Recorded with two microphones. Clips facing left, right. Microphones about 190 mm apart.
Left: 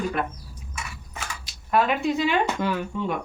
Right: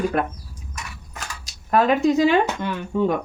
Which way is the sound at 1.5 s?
40° right (ahead or behind).